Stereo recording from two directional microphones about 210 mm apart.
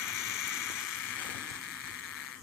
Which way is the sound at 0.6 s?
10° left (ahead or behind).